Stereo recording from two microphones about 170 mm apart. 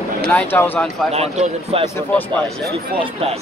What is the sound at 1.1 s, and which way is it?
Speech, 40° right (ahead or behind).